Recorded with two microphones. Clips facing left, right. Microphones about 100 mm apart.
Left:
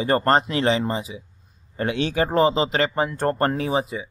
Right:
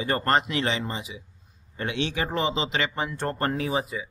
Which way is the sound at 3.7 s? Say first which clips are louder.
Left 4 dB; 25° left (ahead or behind).